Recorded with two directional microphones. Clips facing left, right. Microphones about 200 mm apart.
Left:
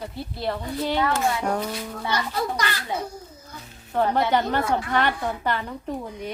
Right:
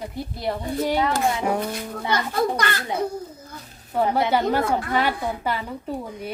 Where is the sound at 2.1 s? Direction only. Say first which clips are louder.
Right 4 dB; 55° right (ahead or behind).